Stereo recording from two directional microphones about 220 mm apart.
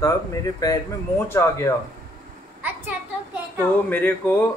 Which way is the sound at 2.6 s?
10° right (ahead or behind).